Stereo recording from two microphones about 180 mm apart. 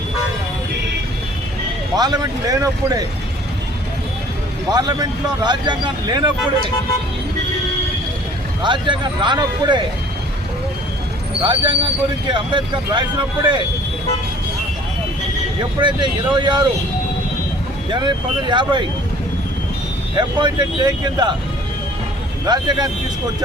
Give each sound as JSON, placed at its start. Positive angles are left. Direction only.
{"t": 2.0, "sound": "speech", "side_deg": -20}
{"t": 4.7, "sound": "speech", "side_deg": -20}
{"t": 8.6, "sound": "speech", "side_deg": -25}
{"t": 11.4, "sound": "speech", "side_deg": -25}
{"t": 15.8, "sound": "speech", "side_deg": -25}
{"t": 17.9, "sound": "speech", "side_deg": -25}
{"t": 20.1, "sound": "speech", "side_deg": -25}
{"t": 22.4, "sound": "speech", "side_deg": -25}